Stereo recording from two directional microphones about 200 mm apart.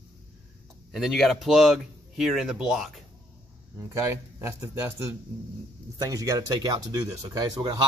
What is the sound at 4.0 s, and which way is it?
Speech, 15° right (ahead or behind).